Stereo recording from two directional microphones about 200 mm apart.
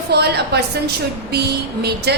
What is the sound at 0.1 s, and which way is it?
Speech, 55° right (ahead or behind).